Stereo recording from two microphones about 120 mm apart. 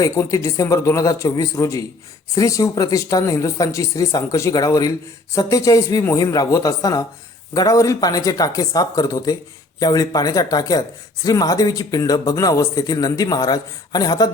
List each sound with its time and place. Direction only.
0.0 s speech: 30° left (ahead or behind)